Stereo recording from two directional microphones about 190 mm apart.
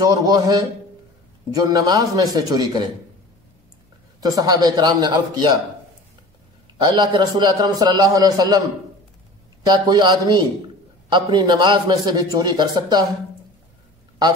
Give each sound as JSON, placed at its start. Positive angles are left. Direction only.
{"t": 0.0, "sound": "a man's voice", "side_deg": -20}
{"t": 4.2, "sound": "a man's voice", "side_deg": -20}
{"t": 6.8, "sound": "a man's voice", "side_deg": -20}
{"t": 9.7, "sound": "a man's voice", "side_deg": -20}